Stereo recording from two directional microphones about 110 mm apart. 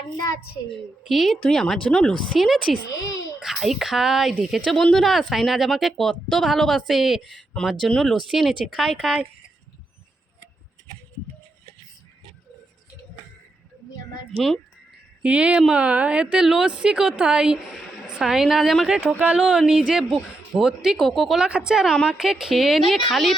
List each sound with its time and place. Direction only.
1.0 s a woman's voice: centre (ahead or behind)
2.9 s a child's voice: 30° left (ahead or behind)
3.4 s a woman's voice: centre (ahead or behind)
14.3 s a woman's voice: 5° left (ahead or behind)
15.2 s a woman's voice: 10° right (ahead or behind)
19.2 s a woman's voice: 10° right (ahead or behind)